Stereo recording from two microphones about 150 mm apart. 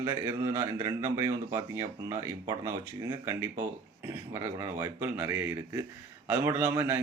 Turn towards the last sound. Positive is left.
turn(degrees=-15)  # may be behind; listen again after turning